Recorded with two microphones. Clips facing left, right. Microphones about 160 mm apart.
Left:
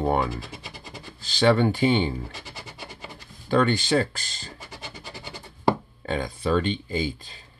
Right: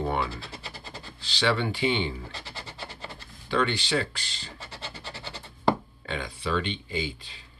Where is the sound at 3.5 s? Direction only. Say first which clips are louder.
Left 5 dB; 45° left (ahead or behind).